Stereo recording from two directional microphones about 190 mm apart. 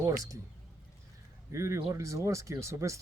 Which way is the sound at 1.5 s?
15° right (ahead or behind).